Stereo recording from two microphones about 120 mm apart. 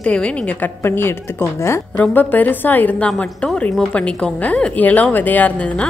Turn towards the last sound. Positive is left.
turn(degrees=10)  # may be behind; listen again after turning